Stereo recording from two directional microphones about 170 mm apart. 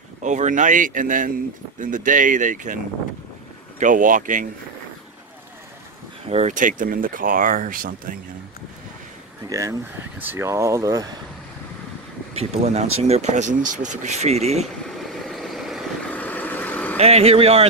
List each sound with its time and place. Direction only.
0.2 s speech: 45° right (ahead or behind)
3.8 s speech: 50° right (ahead or behind)
6.2 s speech: 40° right (ahead or behind)
9.5 s speech: 20° right (ahead or behind)
12.4 s speech: 40° right (ahead or behind)
14.9 s vehicle: centre (ahead or behind)
17.0 s speech: 35° right (ahead or behind)